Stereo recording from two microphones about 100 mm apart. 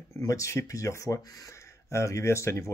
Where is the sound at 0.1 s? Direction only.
35° left (ahead or behind).